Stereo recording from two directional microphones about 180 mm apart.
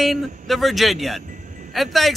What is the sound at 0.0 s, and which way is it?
Speech, centre (ahead or behind).